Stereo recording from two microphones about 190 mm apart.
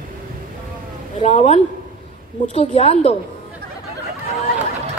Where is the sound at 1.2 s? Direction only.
35° left (ahead or behind).